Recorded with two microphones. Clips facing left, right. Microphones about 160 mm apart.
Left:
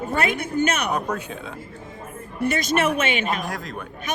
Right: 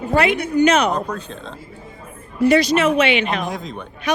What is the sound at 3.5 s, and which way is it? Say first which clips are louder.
Speech: right 3 dB; centre (ahead or behind).